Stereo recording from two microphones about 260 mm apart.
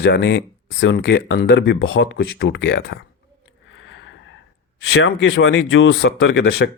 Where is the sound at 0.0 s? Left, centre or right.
Left.